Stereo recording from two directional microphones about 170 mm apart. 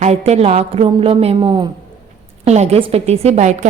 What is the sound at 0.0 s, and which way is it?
A woman's voice, 40° right (ahead or behind).